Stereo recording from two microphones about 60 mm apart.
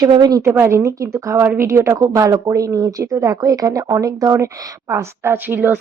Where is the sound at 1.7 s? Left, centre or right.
Right.